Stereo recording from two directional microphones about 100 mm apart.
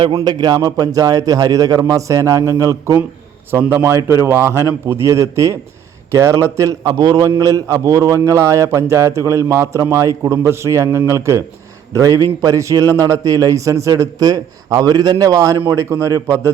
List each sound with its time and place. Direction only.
0.1 s a man's voice: 45° right (ahead or behind)
3.6 s a man's voice: 20° right (ahead or behind)